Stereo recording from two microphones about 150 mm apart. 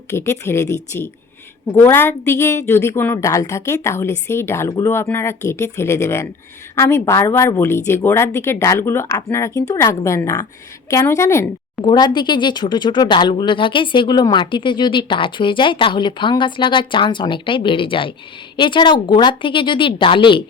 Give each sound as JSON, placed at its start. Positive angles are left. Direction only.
{"t": 0.1, "sound": "a woman's voice", "side_deg": 15}